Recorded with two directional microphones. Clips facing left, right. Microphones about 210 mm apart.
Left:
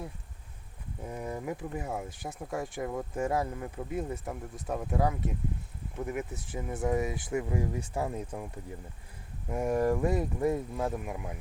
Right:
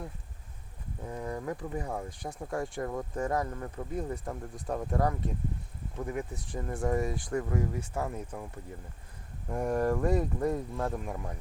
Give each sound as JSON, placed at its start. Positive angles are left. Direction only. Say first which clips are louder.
{"t": 1.0, "sound": "speech", "louder": "even", "side_deg": 10}
{"t": 7.5, "sound": "speech", "louder": "even", "side_deg": 15}
{"t": 9.5, "sound": "speech", "louder": "left 1 dB", "side_deg": 5}